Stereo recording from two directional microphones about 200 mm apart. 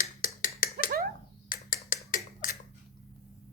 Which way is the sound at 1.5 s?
45° left (ahead or behind).